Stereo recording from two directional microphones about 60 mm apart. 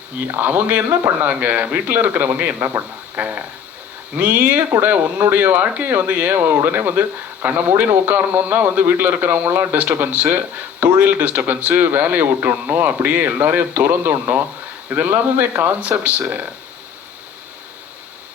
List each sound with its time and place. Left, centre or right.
0.3 s a man's voice: right
11.4 s a man's voice: right